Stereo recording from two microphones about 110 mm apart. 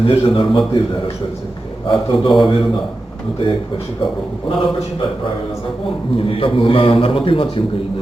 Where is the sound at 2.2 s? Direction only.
45° left (ahead or behind).